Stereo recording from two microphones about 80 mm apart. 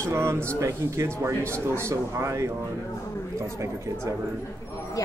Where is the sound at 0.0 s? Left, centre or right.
Right.